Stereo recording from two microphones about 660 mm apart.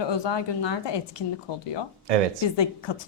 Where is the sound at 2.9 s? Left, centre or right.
Left.